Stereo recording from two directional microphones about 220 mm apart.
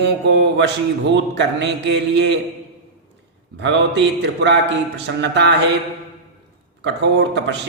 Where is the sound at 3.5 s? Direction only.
55° right (ahead or behind).